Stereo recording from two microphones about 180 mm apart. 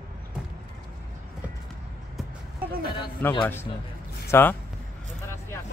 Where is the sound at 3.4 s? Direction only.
15° left (ahead or behind).